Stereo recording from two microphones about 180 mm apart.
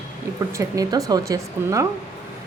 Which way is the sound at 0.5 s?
20° right (ahead or behind).